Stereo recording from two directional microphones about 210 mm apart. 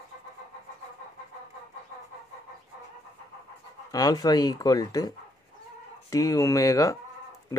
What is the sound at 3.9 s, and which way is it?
Speech, 20° left (ahead or behind).